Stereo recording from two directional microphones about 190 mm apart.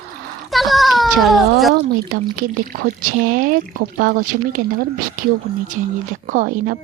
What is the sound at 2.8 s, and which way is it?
Speech, 45° right (ahead or behind).